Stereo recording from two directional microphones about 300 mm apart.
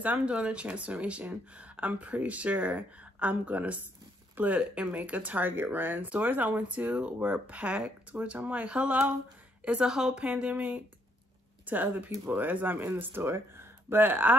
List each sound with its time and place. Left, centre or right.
0.0 s speech: centre